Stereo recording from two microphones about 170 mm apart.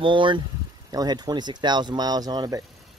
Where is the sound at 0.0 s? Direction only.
30° right (ahead or behind).